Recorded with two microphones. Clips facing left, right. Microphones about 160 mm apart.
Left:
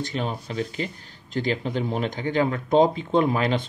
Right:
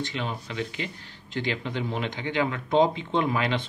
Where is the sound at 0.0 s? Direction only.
40° left (ahead or behind).